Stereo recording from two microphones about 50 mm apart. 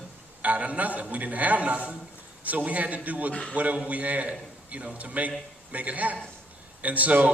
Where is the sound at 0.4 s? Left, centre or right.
Right.